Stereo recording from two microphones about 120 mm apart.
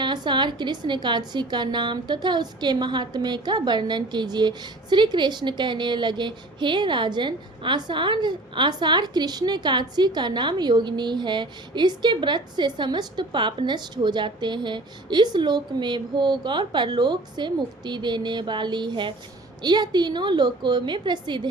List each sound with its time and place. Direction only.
0.0 s speech: 40° right (ahead or behind)